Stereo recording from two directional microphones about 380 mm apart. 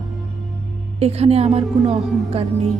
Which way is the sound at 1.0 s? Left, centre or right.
Centre.